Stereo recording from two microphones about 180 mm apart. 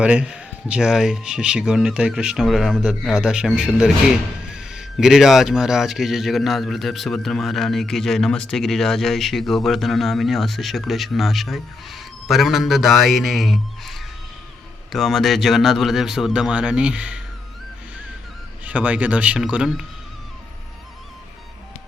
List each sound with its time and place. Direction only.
0.0 s speech: 5° right (ahead or behind)
18.6 s speech: 5° right (ahead or behind)